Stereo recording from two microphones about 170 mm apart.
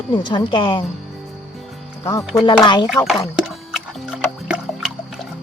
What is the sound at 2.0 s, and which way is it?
Speech, 20° left (ahead or behind).